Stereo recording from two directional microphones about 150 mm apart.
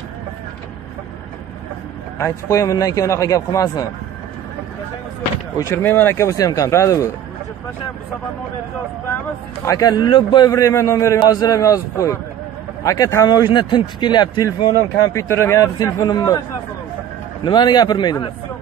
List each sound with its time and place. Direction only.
2.5 s speech: 20° left (ahead or behind)
5.6 s speech: 15° left (ahead or behind)
9.7 s speech: 25° left (ahead or behind)
17.5 s speech: 30° left (ahead or behind)